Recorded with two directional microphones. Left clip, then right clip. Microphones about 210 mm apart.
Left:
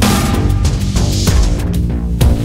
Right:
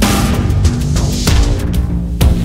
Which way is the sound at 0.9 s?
Centre (ahead or behind).